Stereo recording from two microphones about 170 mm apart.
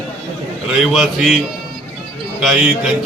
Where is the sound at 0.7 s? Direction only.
Centre (ahead or behind).